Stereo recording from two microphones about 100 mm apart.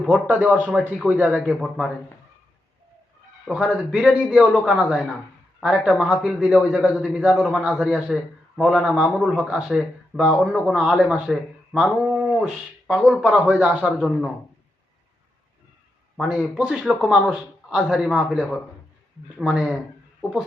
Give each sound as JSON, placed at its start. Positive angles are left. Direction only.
{"t": 0.1, "sound": "a man's voice", "side_deg": -15}
{"t": 3.4, "sound": "a man's voice", "side_deg": -5}
{"t": 12.0, "sound": "a sound", "side_deg": -10}
{"t": 13.5, "sound": "a man's voice", "side_deg": -10}
{"t": 16.1, "sound": "a man's voice", "side_deg": -5}